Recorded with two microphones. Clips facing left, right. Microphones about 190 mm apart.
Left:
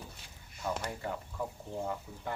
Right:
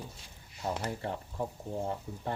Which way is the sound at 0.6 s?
35° right (ahead or behind).